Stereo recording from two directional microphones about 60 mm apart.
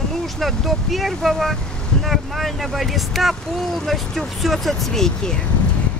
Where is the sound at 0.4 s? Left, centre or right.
Centre.